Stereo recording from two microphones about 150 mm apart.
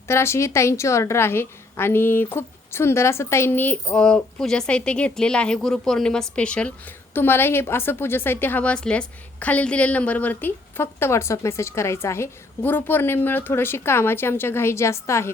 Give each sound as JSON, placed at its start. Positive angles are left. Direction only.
{"t": 0.1, "sound": "a woman's voice", "side_deg": 15}